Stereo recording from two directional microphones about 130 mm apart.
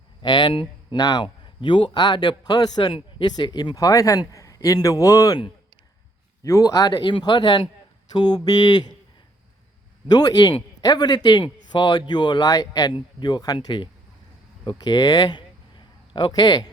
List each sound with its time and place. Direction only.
0.2 s speech: 35° left (ahead or behind)
6.4 s speech: 25° left (ahead or behind)
10.1 s speech: 30° left (ahead or behind)